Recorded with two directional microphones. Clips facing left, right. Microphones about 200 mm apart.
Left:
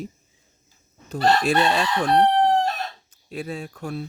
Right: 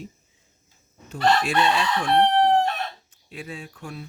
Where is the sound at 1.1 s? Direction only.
40° left (ahead or behind).